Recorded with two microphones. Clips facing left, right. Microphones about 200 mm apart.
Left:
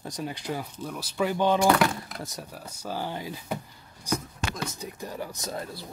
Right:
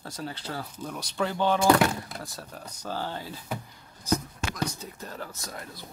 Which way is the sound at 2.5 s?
5° left (ahead or behind).